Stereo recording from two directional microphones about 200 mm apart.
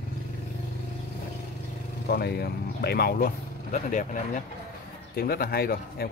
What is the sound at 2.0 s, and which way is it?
Speech, 55° left (ahead or behind).